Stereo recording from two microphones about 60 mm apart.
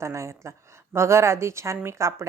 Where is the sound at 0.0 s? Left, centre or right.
Right.